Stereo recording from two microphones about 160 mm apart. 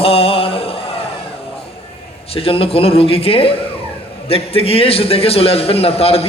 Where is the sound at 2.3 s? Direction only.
35° left (ahead or behind).